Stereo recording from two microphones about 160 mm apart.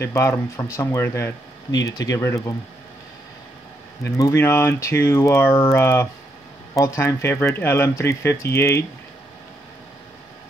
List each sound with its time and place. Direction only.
0.0 s speech: 15° left (ahead or behind)
4.0 s speech: 15° left (ahead or behind)